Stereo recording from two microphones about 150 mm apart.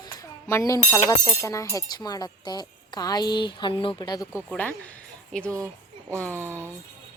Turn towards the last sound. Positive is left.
turn(degrees=-15)  # may be behind; listen again after turning